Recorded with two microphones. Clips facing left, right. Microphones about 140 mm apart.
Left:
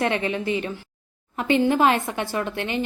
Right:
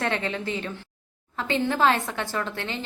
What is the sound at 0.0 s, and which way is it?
A woman's voice, 15° left (ahead or behind).